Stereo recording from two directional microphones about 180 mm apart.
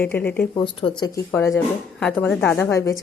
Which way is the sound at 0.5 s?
30° left (ahead or behind).